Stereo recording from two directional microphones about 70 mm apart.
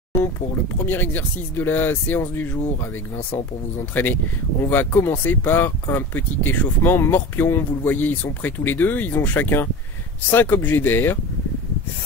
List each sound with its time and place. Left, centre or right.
0.8 s speech: left
3.9 s speech: left